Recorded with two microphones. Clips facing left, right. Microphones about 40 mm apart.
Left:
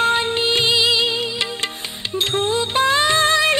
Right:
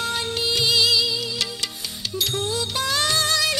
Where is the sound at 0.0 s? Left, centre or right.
Left.